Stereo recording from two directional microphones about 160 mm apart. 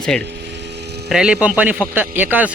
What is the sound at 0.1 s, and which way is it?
A man's voice, 5° left (ahead or behind).